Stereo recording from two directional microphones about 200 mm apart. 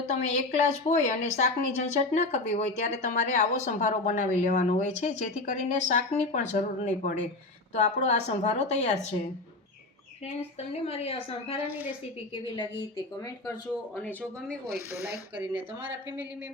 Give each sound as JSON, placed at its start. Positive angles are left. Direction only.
{"t": 0.1, "sound": "a woman's voice", "side_deg": 35}
{"t": 10.2, "sound": "a woman's voice", "side_deg": 35}
{"t": 14.0, "sound": "speech", "side_deg": 5}
{"t": 15.0, "sound": "speech", "side_deg": -10}